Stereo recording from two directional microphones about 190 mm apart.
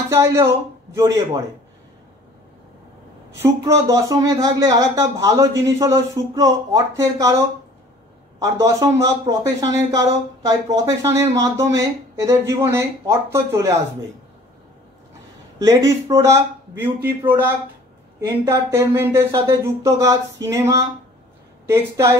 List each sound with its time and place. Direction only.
0.1 s a man's voice: 15° right (ahead or behind)
3.3 s a man's voice: 15° right (ahead or behind)
15.6 s a man's voice: 20° right (ahead or behind)
18.2 s a man's voice: 15° right (ahead or behind)